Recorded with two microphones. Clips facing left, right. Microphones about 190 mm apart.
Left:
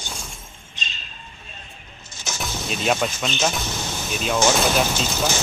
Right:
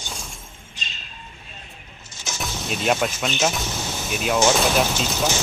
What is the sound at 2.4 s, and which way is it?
Speech, centre (ahead or behind).